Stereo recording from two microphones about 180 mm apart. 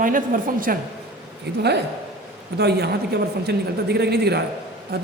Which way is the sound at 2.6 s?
65° right (ahead or behind).